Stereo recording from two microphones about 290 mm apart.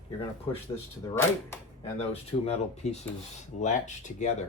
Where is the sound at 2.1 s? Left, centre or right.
Left.